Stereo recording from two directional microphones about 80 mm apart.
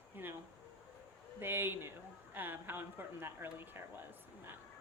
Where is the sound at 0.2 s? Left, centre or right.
Right.